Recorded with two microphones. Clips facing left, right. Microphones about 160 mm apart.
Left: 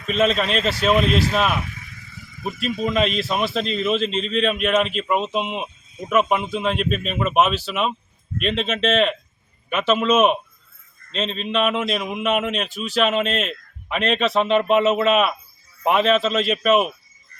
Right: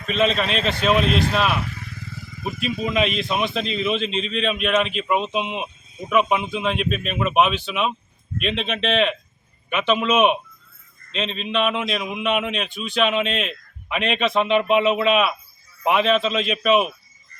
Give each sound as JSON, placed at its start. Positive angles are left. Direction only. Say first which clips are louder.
{"t": 0.1, "sound": "a man's voice", "louder": "left 1 dB", "side_deg": 0}
{"t": 1.6, "sound": "motorcycle", "louder": "right 5 dB", "side_deg": -70}
{"t": 2.8, "sound": "a man's voice", "louder": "left 1 dB", "side_deg": 0}